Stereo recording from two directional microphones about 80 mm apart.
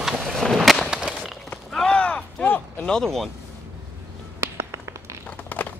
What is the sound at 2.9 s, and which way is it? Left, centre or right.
Speech, centre.